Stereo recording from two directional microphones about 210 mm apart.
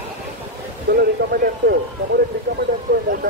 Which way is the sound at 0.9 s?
45° right (ahead or behind).